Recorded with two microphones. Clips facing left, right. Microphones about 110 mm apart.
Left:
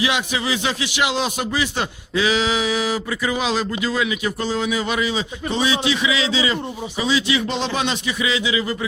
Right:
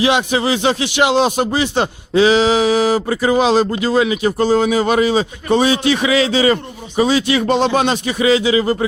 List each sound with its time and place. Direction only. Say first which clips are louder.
0.3 s speech: right 7 dB; 35° right (ahead or behind)